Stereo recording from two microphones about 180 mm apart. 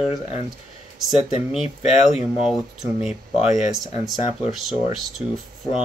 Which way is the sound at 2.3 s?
5° right (ahead or behind).